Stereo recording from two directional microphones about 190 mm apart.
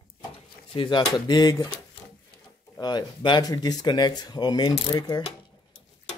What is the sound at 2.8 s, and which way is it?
Speech, 20° left (ahead or behind).